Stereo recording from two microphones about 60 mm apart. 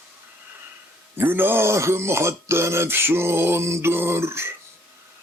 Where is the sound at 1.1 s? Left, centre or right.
Right.